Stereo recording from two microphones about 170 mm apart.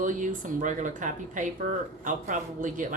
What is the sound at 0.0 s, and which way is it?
Speech, 50° right (ahead or behind).